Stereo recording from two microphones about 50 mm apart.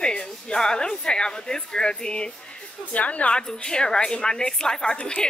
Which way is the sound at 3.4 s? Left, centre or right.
Centre.